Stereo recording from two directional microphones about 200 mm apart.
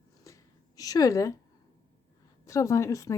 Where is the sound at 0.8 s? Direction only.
20° left (ahead or behind).